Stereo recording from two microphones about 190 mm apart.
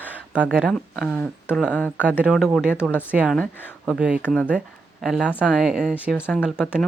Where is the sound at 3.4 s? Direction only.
10° left (ahead or behind).